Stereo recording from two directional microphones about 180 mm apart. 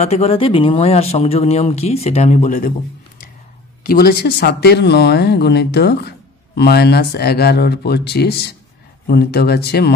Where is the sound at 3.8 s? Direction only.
55° left (ahead or behind).